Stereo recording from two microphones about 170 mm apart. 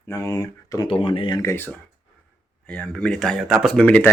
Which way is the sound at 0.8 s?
30° left (ahead or behind).